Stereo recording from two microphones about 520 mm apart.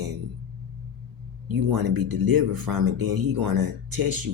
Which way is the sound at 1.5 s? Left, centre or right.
Right.